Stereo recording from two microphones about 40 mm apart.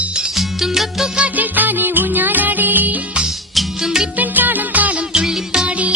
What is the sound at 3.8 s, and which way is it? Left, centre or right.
Music, centre.